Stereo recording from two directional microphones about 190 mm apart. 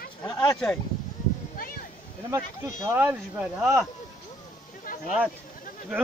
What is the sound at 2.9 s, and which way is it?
Speech, 10° right (ahead or behind).